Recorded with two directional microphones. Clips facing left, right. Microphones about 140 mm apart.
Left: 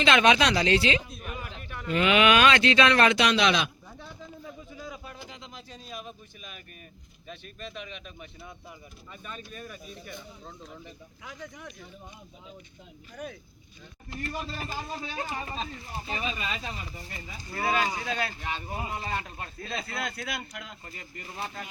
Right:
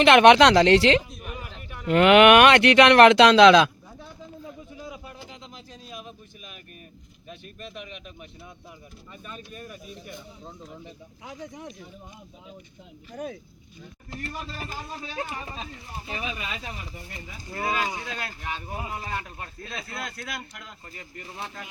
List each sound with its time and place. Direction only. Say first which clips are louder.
0.0 s speech: right 8 dB; 65° right (ahead or behind)
1.1 s a sound: even; centre (ahead or behind)
1.9 s speech: right 8 dB; 70° right (ahead or behind); by 3.6 s 90° right
3.9 s bird: right 2 dB; 10° right (ahead or behind)
7.3 s speech: even; 5° right (ahead or behind)
11.3 s speech: right 4 dB; 35° right (ahead or behind)
13.2 s speech: right 5 dB; 25° right (ahead or behind)
15.1 s speech: right 2 dB; 10° right (ahead or behind)
17.7 s speech: left 2 dB; 10° right (ahead or behind); by 21.7 s 5° left (ahead or behind)